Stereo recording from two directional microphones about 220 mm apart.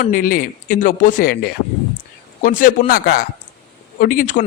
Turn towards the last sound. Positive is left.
turn(degrees=35)  # may be behind; listen again after turning